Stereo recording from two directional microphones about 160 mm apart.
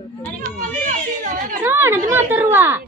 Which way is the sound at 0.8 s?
55° right (ahead or behind).